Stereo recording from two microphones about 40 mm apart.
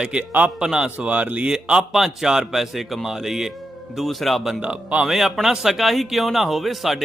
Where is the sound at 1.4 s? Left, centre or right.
Right.